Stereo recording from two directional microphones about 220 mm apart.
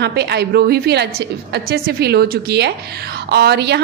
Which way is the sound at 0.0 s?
50° right (ahead or behind).